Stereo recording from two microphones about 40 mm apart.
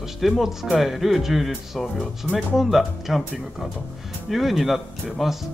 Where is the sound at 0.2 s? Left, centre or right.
Centre.